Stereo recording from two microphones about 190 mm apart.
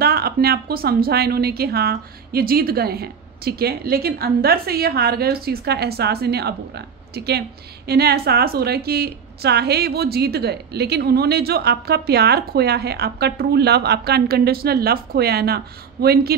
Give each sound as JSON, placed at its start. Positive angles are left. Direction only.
{"t": 0.0, "sound": "a woman's voice", "side_deg": -55}